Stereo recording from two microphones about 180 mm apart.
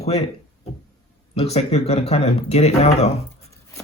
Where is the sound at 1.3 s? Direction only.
35° left (ahead or behind).